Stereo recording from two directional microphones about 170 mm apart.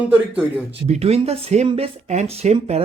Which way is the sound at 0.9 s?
35° right (ahead or behind).